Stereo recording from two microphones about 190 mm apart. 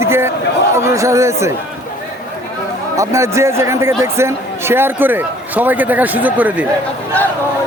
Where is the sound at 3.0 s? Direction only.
15° right (ahead or behind).